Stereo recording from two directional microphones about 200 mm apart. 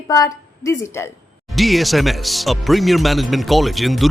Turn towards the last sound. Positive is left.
turn(degrees=0)  # may be behind; listen again after turning